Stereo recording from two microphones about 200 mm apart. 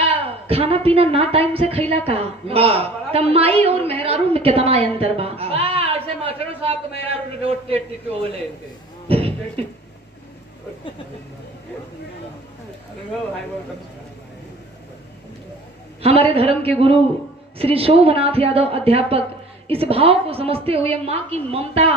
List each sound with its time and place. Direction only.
0.1 s a woman's voice: 30° right (ahead or behind)
9.0 s speech: 30° right (ahead or behind)
16.0 s a woman's voice: 30° right (ahead or behind)